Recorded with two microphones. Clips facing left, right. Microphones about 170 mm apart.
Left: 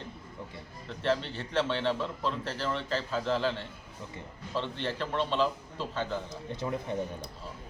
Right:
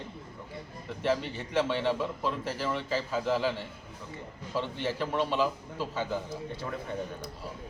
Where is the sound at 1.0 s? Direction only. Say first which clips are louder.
Even; 10° right (ahead or behind).